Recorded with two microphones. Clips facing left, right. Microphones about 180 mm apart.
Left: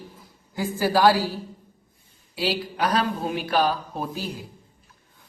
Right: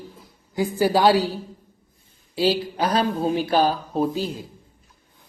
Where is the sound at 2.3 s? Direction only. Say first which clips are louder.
Right 5 dB; 30° right (ahead or behind).